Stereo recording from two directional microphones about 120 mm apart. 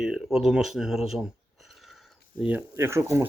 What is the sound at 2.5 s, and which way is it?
Speech, 20° right (ahead or behind).